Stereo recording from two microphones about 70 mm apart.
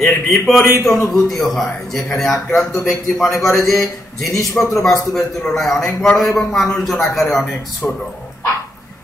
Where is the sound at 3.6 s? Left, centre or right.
Centre.